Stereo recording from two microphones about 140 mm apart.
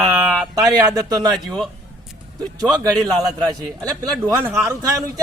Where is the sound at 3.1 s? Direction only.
25° right (ahead or behind).